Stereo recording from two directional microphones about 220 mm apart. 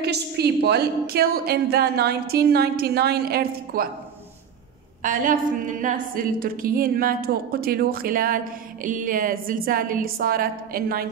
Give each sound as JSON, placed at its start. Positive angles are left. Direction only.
{"t": 0.0, "sound": "a woman's voice", "side_deg": -45}
{"t": 5.0, "sound": "a woman's voice", "side_deg": -40}